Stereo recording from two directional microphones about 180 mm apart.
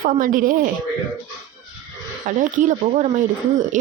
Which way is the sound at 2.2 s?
45° right (ahead or behind).